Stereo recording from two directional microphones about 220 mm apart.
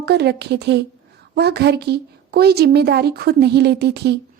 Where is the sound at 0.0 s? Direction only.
50° right (ahead or behind).